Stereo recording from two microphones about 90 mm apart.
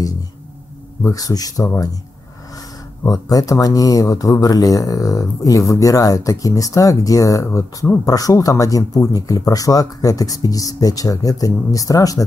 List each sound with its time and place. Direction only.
1.0 s speech: 40° left (ahead or behind)
3.0 s speech: 40° left (ahead or behind)
8.0 s speech: 40° left (ahead or behind)